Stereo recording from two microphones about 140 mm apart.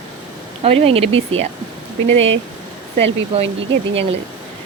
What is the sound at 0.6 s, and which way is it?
Speech, 45° right (ahead or behind).